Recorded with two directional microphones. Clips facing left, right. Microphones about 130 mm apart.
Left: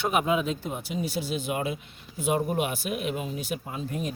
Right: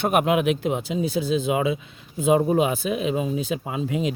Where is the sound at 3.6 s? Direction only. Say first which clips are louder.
Right 7 dB; 90° right.